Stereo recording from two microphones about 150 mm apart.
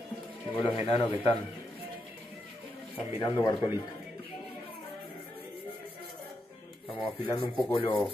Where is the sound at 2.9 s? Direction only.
35° left (ahead or behind).